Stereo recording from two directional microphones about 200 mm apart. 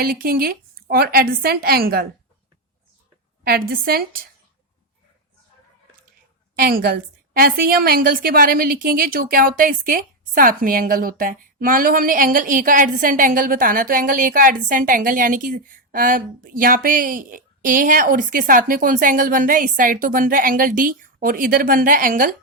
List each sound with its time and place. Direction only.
0.0 s a woman's voice: 45° right (ahead or behind)
3.4 s a woman's voice: 50° right (ahead or behind)
6.6 s a woman's voice: 50° right (ahead or behind)